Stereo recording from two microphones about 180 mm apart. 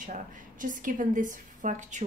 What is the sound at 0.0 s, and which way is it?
Speech, 45° right (ahead or behind).